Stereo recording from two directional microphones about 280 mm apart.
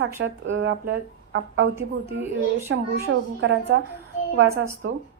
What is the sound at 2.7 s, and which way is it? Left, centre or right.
A woman's voice, right.